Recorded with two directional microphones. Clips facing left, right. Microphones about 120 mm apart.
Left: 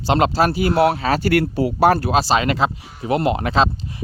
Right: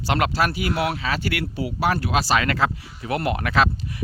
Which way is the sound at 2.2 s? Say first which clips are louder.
Left 3 dB; 25° left (ahead or behind).